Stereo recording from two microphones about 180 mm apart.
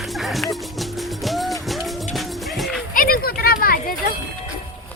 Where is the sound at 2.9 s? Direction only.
50° left (ahead or behind).